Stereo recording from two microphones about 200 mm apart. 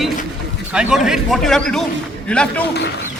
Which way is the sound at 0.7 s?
5° right (ahead or behind).